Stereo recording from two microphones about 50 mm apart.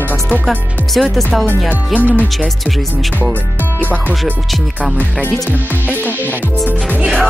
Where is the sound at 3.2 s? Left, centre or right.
Left.